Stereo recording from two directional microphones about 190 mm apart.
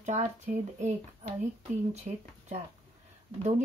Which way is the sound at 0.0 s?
35° right (ahead or behind).